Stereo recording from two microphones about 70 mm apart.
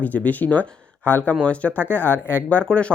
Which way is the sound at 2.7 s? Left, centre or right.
Centre.